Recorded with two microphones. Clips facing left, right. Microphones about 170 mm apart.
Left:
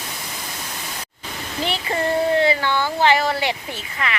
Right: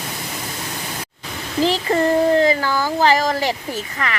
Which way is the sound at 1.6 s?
35° right (ahead or behind).